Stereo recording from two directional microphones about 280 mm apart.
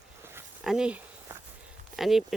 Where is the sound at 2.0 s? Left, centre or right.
Centre.